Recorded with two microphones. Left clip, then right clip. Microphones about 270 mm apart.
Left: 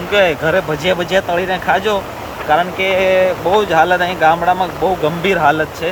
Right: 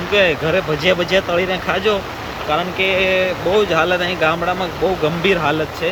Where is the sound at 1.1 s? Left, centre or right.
Left.